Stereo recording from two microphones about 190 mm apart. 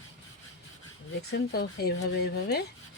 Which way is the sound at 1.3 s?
55° left (ahead or behind).